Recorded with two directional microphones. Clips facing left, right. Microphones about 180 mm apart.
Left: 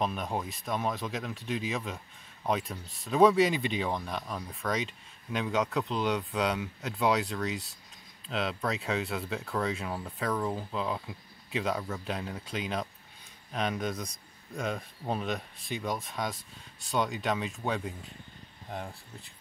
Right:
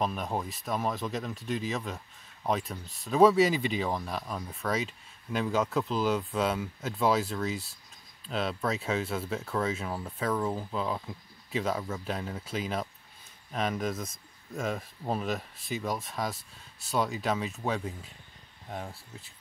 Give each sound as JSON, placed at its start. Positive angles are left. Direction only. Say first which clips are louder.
{"t": 0.0, "sound": "speech", "louder": "right 1 dB", "side_deg": 0}